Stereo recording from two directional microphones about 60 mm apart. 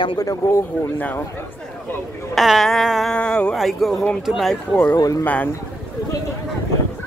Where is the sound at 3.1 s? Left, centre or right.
Centre.